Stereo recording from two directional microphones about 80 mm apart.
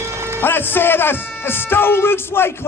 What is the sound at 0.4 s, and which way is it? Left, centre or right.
Speech, left.